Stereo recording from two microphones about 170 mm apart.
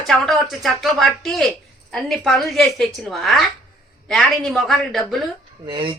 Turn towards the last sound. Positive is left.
turn(degrees=-30)  # may be behind; listen again after turning